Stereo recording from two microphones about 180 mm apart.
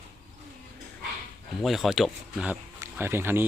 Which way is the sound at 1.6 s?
Centre (ahead or behind).